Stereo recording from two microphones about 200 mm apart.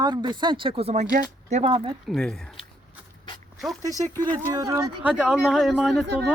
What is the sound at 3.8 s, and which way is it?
Speech, 15° right (ahead or behind).